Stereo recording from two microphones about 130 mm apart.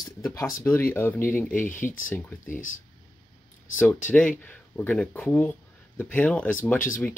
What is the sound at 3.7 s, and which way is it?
Speech, 10° left (ahead or behind).